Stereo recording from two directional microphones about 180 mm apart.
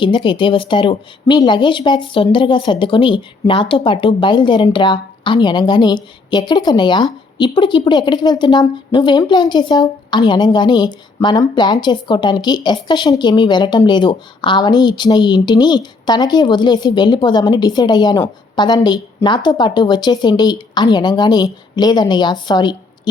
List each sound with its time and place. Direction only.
0.0 s speech: 25° left (ahead or behind)